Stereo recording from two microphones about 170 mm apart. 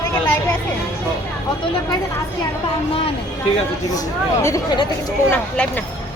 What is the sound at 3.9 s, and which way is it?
Speech, 20° left (ahead or behind).